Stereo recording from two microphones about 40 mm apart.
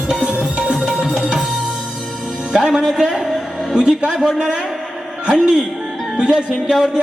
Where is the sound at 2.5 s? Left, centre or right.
Centre.